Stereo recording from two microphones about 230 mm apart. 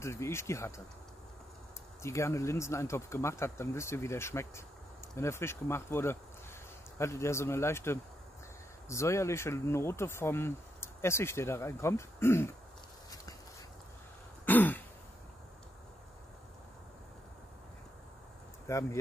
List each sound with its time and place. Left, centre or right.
0.0 s speech: centre
2.0 s speech: centre
14.4 s throat clearing: centre
18.7 s speech: centre